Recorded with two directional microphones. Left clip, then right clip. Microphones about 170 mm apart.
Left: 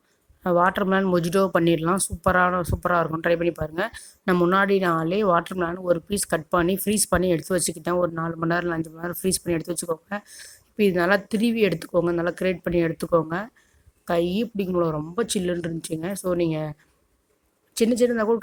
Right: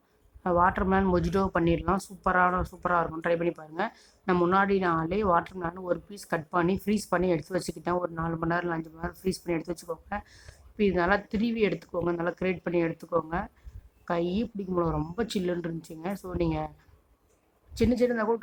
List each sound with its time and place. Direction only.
0.4 s speech: 25° left (ahead or behind)
17.7 s speech: 25° left (ahead or behind)